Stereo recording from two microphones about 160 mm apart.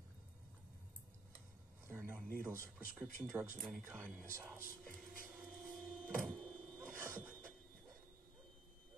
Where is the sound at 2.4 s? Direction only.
10° right (ahead or behind).